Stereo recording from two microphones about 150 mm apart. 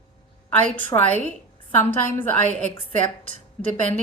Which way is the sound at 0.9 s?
25° left (ahead or behind).